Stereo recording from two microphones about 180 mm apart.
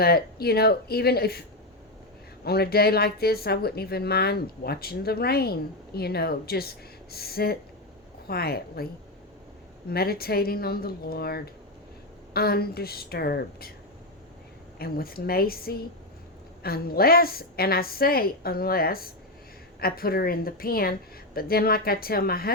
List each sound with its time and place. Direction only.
0.0 s speech: 60° left (ahead or behind)
9.9 s speech: 60° left (ahead or behind)
14.8 s speech: 55° left (ahead or behind)